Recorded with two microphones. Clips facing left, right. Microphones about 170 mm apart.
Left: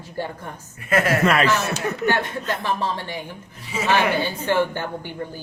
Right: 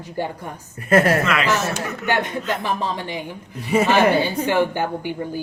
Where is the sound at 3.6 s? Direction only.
55° right (ahead or behind).